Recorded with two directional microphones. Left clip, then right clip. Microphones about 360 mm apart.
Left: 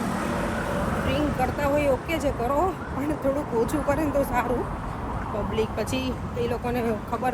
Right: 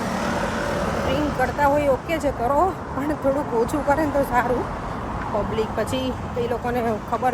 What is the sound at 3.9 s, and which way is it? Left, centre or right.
Speech, centre.